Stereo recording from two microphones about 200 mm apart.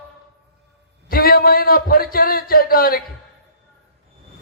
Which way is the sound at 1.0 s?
45° left (ahead or behind).